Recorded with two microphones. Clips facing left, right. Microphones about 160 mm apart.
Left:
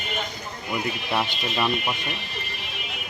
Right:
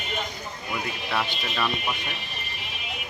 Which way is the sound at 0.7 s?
15° left (ahead or behind).